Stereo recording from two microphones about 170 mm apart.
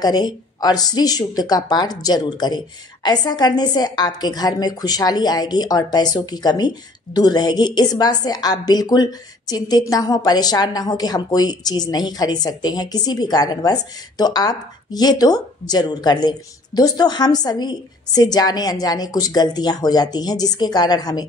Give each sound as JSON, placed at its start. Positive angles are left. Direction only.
{"t": 0.0, "sound": "a woman's voice", "side_deg": 25}